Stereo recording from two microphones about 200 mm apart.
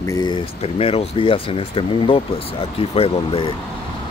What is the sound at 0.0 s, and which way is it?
Speech, 20° left (ahead or behind).